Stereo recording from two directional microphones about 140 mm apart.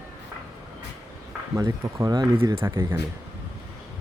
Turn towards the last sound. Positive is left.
turn(degrees=-20)  # may be behind; listen again after turning